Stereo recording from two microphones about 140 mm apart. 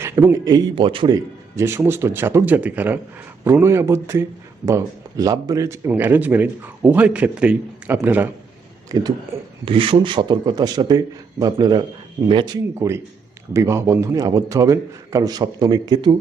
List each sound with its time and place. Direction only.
0.0 s a man's voice: 20° right (ahead or behind)
8.9 s a man's voice: 30° right (ahead or behind)
9.3 s speech: 20° right (ahead or behind)
9.6 s a man's voice: 40° right (ahead or behind)